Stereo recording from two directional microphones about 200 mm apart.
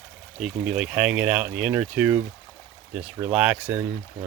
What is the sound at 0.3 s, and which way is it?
Speech, centre (ahead or behind).